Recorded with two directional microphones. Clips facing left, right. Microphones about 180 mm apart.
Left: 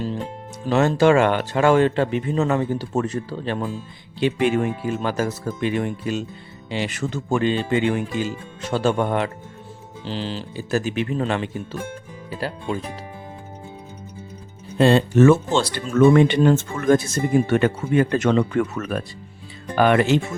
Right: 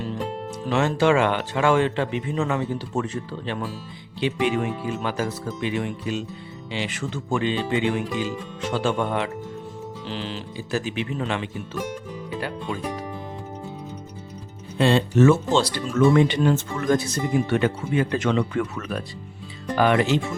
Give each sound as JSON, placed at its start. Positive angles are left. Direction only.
{"t": 0.7, "sound": "speech", "side_deg": 40}
{"t": 10.1, "sound": "speech", "side_deg": 30}
{"t": 10.7, "sound": "speech", "side_deg": 45}
{"t": 14.8, "sound": "speech", "side_deg": 45}